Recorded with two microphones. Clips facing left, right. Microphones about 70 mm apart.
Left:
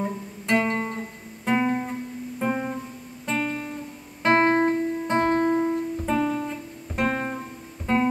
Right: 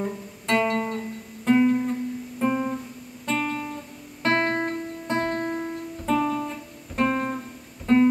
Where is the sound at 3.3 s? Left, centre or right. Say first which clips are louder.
Right 1 dB; centre.